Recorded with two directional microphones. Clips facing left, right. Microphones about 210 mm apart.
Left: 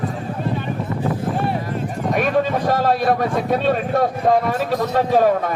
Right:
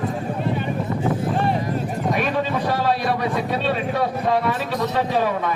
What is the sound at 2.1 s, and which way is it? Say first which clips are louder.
A man's voice: left 7 dB; 45° left (ahead or behind).